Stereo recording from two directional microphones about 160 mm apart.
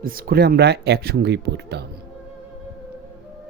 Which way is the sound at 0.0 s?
65° right (ahead or behind).